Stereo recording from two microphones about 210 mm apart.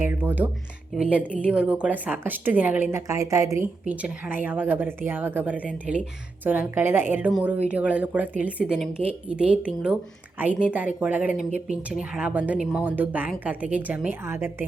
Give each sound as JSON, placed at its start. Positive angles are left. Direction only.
{"t": 0.0, "sound": "a woman's voice", "side_deg": -10}